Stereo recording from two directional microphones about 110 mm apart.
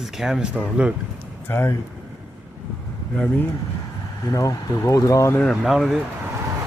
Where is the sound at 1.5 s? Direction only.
25° left (ahead or behind).